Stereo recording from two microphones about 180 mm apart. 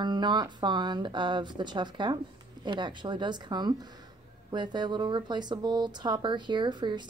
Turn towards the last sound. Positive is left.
turn(degrees=-25)  # may be behind; listen again after turning